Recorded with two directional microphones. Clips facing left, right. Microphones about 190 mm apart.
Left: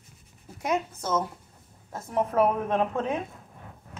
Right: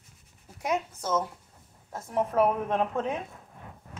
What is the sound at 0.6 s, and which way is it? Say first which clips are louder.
Speech: left 2 dB; 10° right (ahead or behind).